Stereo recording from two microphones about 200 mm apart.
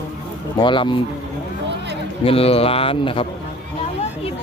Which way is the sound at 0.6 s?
25° left (ahead or behind).